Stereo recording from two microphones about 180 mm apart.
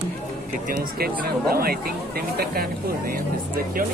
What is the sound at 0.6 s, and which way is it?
Speech, 55° right (ahead or behind).